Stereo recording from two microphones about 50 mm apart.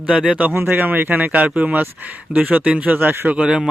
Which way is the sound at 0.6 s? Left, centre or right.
Right.